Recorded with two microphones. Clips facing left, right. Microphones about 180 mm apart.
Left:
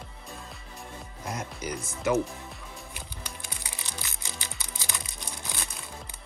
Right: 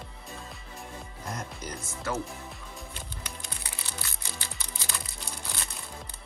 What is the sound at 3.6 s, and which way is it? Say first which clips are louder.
Music: even; 15° left (ahead or behind).